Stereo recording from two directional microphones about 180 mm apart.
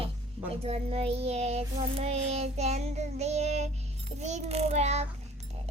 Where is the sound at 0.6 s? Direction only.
35° right (ahead or behind).